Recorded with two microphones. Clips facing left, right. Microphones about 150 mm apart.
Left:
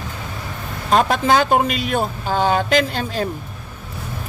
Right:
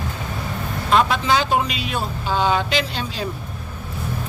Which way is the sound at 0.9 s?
45° left (ahead or behind).